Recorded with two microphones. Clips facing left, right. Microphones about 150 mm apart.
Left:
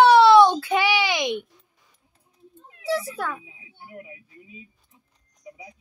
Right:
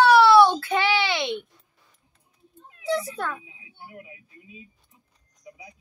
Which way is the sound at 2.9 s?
5° left (ahead or behind).